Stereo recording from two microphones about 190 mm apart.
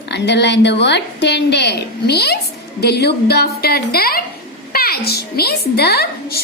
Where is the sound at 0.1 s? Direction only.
65° left (ahead or behind).